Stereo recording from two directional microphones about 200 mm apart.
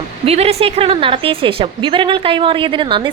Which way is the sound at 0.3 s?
30° right (ahead or behind).